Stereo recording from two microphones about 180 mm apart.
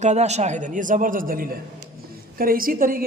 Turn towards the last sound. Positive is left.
turn(degrees=-55)  # may be behind; listen again after turning